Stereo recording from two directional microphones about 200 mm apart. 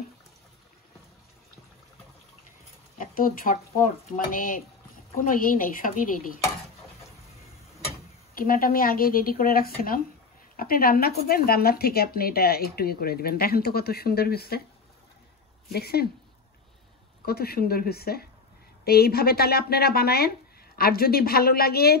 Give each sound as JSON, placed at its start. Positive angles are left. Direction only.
{"t": 3.0, "sound": "speech", "side_deg": 45}
{"t": 8.4, "sound": "speech", "side_deg": 45}
{"t": 15.7, "sound": "speech", "side_deg": 50}
{"t": 17.2, "sound": "speech", "side_deg": 50}